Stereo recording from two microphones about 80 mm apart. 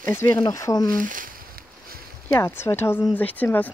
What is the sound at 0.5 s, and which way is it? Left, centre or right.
Speech, left.